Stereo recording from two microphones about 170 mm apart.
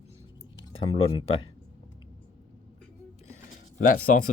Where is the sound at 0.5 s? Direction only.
30° left (ahead or behind).